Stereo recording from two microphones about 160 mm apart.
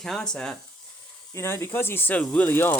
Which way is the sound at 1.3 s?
15° left (ahead or behind).